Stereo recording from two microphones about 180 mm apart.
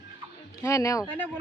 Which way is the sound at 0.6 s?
15° left (ahead or behind).